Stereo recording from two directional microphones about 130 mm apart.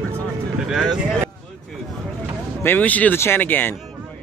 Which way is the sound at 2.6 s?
15° left (ahead or behind).